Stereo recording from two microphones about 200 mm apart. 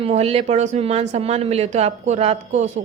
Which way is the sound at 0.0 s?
30° right (ahead or behind).